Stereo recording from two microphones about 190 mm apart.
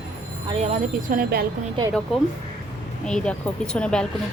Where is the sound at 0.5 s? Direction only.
40° right (ahead or behind).